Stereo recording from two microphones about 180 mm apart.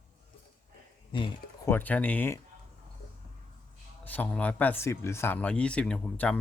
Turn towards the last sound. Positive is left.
turn(degrees=5)  # may be behind; listen again after turning